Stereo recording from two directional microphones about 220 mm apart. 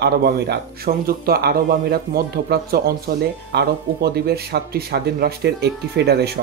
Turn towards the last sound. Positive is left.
turn(degrees=-45)  # may be behind; listen again after turning